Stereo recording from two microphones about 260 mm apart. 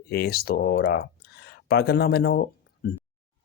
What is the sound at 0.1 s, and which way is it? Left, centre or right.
Speech, left.